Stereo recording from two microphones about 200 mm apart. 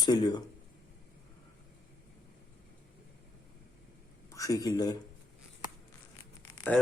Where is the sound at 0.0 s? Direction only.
20° left (ahead or behind).